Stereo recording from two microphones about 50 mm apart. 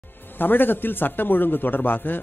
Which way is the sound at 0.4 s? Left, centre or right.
Left.